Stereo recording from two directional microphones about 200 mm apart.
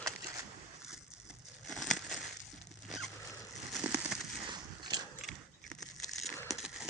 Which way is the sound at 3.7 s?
5° right (ahead or behind).